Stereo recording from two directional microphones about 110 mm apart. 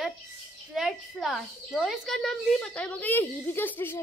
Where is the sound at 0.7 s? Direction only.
Centre (ahead or behind).